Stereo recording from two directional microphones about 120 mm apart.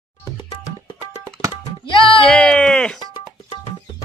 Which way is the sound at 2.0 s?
45° left (ahead or behind).